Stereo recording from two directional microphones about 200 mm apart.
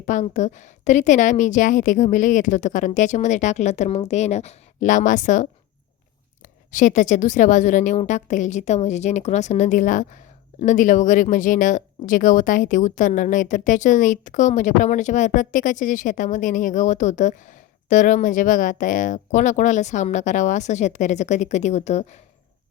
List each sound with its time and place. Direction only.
0.1 s speech: 35° left (ahead or behind)